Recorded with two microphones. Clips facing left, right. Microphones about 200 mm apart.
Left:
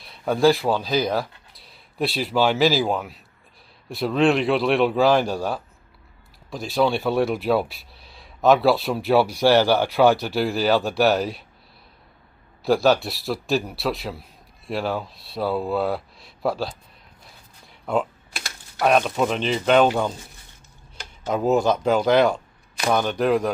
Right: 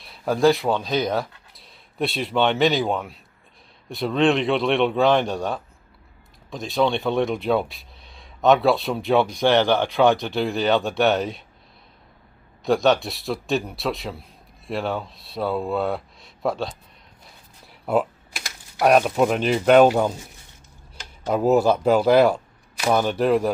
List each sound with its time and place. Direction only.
0.0 s speech: centre (ahead or behind)
12.6 s speech: centre (ahead or behind)
17.2 s typewriter: 5° right (ahead or behind)
21.2 s speech: 5° right (ahead or behind)